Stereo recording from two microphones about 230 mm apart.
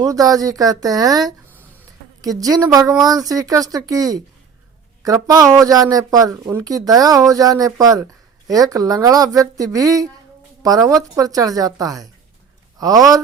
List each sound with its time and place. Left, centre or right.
0.0 s speech: centre